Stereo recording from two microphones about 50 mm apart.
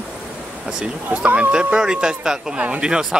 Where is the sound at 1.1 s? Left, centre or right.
Right.